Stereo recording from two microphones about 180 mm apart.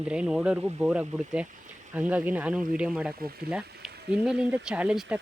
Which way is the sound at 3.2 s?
55° right (ahead or behind).